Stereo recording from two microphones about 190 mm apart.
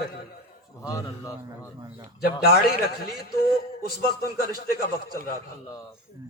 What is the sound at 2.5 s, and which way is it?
Speech, 55° left (ahead or behind).